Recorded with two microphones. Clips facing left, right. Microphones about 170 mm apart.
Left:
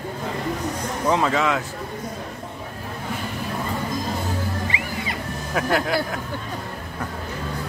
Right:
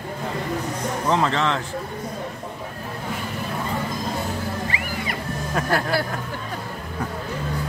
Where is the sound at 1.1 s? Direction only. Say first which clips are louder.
Left 1 dB; 10° left (ahead or behind).